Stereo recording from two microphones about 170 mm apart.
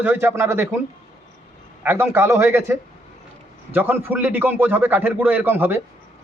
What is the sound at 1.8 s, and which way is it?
A man's voice, 15° right (ahead or behind).